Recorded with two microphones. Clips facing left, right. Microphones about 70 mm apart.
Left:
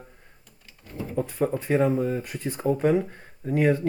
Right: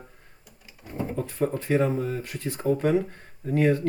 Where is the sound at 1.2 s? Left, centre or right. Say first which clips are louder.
Left 1 dB; centre.